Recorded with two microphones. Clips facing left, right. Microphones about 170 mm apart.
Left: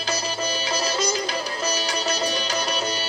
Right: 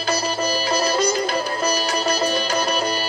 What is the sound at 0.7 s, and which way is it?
Music, 55° right (ahead or behind).